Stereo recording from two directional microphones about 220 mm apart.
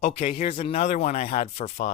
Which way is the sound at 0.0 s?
35° left (ahead or behind).